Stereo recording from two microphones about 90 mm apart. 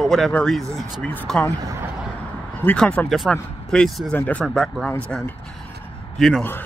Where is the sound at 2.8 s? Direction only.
15° left (ahead or behind).